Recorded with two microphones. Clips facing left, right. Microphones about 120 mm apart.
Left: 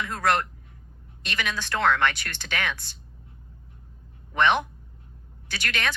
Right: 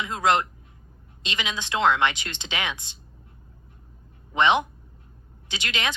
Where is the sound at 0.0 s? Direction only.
15° right (ahead or behind).